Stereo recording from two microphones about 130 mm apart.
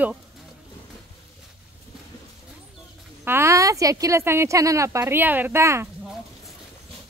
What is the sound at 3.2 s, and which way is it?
A woman's voice, 20° right (ahead or behind).